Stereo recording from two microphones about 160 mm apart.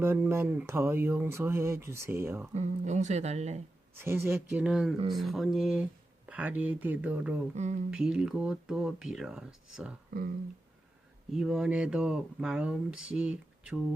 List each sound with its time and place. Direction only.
0.0 s speech: 15° right (ahead or behind)
2.6 s speech: 45° right (ahead or behind)
3.9 s speech: 15° right (ahead or behind)
4.6 s speech: 5° right (ahead or behind)
7.5 s speech: 50° right (ahead or behind)
7.9 s speech: 5° right (ahead or behind)
11.3 s speech: 5° right (ahead or behind)